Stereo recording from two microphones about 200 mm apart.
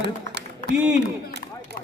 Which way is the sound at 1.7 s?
55° right (ahead or behind).